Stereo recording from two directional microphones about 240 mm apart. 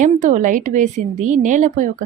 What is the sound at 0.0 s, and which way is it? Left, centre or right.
Speech, right.